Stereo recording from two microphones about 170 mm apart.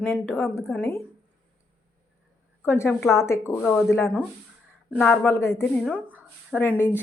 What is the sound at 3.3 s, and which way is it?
A woman's voice, 10° left (ahead or behind).